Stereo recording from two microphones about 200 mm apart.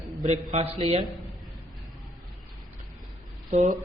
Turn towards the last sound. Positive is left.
turn(degrees=-35)  # may be behind; listen again after turning